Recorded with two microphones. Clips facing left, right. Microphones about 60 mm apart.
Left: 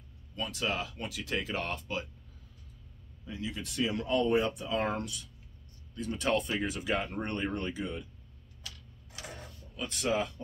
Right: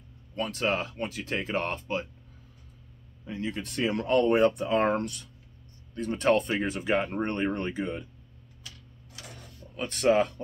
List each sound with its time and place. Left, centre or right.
0.4 s speech: right
3.3 s speech: right
9.1 s a sound: left
9.8 s speech: right